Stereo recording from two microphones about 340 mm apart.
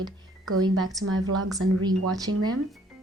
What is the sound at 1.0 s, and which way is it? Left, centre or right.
Speech, right.